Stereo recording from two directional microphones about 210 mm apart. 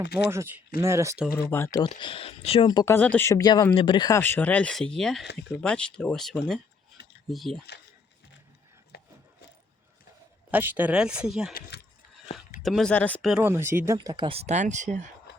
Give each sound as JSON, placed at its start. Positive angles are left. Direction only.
{"t": 0.0, "sound": "speech", "side_deg": 55}
{"t": 0.3, "sound": "speech", "side_deg": -10}
{"t": 1.4, "sound": "speech", "side_deg": 10}
{"t": 2.0, "sound": "speech", "side_deg": 25}
{"t": 8.9, "sound": "wood", "side_deg": 50}
{"t": 10.5, "sound": "speech", "side_deg": -10}
{"t": 12.6, "sound": "speech", "side_deg": 0}
{"t": 13.4, "sound": "speech", "side_deg": -10}